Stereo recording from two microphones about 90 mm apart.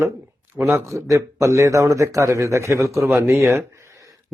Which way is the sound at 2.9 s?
5° right (ahead or behind).